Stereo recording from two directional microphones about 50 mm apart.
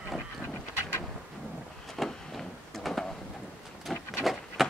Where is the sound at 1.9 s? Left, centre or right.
Centre.